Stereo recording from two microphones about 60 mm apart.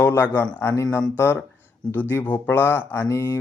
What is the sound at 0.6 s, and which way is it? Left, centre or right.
Speech, left.